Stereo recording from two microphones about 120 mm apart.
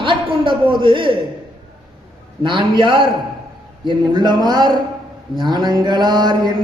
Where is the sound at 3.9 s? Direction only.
35° right (ahead or behind).